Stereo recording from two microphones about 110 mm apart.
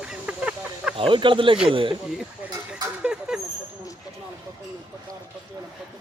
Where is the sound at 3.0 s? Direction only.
5° right (ahead or behind).